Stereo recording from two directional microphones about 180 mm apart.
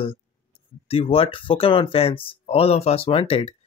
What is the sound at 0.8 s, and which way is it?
Speech, 30° left (ahead or behind).